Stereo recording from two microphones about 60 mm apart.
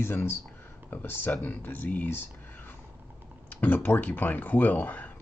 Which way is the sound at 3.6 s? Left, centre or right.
Left.